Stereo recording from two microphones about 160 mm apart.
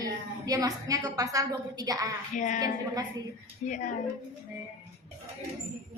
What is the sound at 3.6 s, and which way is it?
Speech, 50° left (ahead or behind).